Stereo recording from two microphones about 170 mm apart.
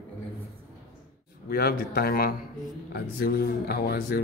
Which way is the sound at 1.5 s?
65° left (ahead or behind).